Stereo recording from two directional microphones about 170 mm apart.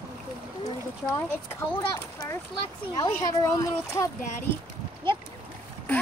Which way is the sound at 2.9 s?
20° left (ahead or behind).